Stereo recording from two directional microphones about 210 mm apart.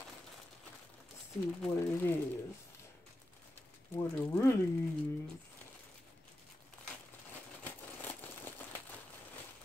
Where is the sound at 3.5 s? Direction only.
10° left (ahead or behind).